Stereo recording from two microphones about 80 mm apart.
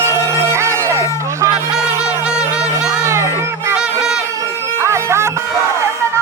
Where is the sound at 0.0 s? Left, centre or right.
Right.